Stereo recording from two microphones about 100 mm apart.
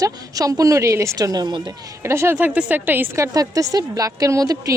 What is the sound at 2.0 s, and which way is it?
Speech, 25° right (ahead or behind).